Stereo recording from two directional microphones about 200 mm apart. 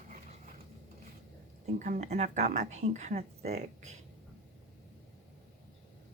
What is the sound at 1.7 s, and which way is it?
Speech, 40° right (ahead or behind).